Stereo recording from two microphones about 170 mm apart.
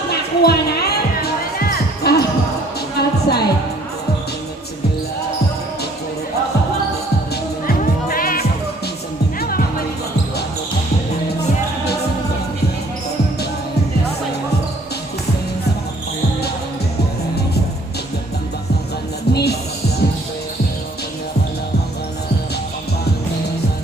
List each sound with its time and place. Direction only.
0.1 s music: 70° left (ahead or behind)
7.7 s music: 55° left (ahead or behind)
19.3 s music: 70° left (ahead or behind)